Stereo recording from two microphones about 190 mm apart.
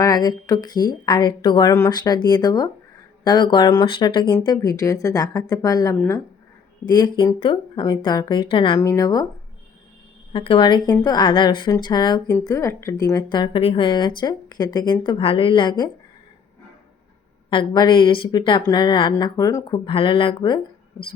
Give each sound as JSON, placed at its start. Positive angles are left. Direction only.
{"t": 0.0, "sound": "speech", "side_deg": 20}
{"t": 10.3, "sound": "speech", "side_deg": 25}
{"t": 17.5, "sound": "speech", "side_deg": 25}